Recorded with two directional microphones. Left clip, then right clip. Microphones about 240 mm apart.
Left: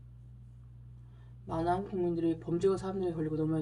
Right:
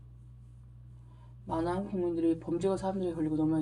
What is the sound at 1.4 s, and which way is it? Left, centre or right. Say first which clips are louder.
Speech: left 1 dB; right.